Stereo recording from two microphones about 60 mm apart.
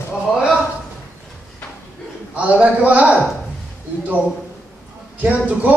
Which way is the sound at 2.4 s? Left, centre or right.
Right.